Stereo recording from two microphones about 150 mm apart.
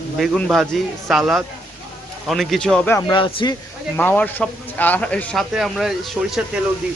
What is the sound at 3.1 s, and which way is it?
Speech, 35° left (ahead or behind).